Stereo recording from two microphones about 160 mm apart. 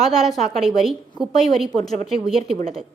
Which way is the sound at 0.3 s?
Centre (ahead or behind).